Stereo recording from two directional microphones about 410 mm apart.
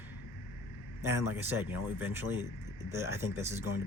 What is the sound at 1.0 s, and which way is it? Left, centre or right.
Speech, centre.